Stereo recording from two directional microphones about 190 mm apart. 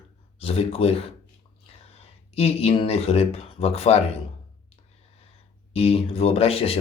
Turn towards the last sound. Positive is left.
turn(degrees=30)  # may be behind; listen again after turning